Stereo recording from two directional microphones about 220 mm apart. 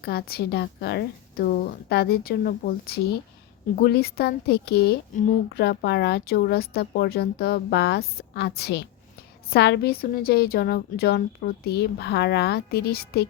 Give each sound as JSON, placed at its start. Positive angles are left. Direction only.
{"t": 0.0, "sound": "speech", "side_deg": 45}